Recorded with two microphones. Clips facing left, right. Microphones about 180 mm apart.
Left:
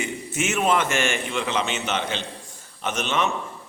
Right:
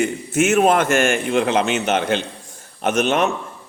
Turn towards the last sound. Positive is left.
turn(degrees=-60)  # may be behind; listen again after turning